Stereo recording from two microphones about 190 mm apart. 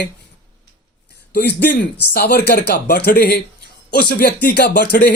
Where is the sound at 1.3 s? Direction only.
60° left (ahead or behind).